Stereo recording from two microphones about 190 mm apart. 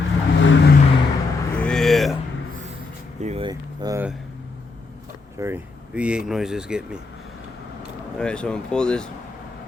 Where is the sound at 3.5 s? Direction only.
20° right (ahead or behind).